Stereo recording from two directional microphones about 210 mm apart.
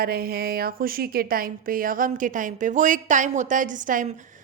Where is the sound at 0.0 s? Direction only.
45° right (ahead or behind).